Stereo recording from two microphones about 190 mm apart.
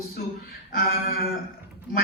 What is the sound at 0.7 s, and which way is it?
Speech, 50° left (ahead or behind).